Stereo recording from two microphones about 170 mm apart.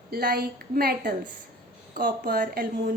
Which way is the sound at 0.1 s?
60° right (ahead or behind).